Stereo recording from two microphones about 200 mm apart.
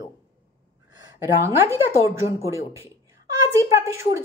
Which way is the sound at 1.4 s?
15° right (ahead or behind).